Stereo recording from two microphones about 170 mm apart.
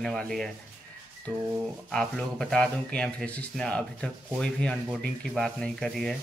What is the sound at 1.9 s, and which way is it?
A man's voice, 5° left (ahead or behind).